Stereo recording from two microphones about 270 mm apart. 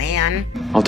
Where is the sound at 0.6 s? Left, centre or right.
Centre.